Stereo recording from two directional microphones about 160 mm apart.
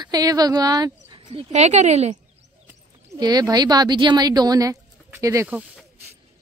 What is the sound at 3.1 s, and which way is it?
Speech, 25° right (ahead or behind).